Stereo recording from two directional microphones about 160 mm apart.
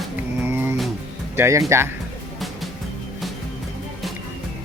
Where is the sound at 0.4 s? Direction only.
15° right (ahead or behind).